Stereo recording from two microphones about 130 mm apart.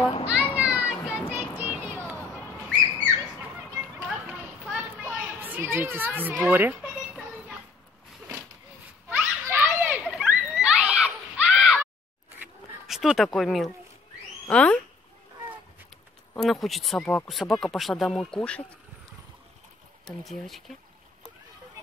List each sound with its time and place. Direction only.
0.0 s children playing: 45° left (ahead or behind)
0.6 s children playing: 10° right (ahead or behind)
4.1 s children playing: 5° right (ahead or behind)
9.1 s children playing: 15° right (ahead or behind)
10.5 s a sound: 5° right (ahead or behind)
12.8 s speech: centre (ahead or behind)
16.3 s speech: centre (ahead or behind)
20.1 s speech: centre (ahead or behind)